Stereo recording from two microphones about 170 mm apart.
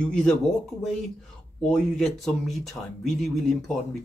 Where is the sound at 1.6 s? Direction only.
5° left (ahead or behind).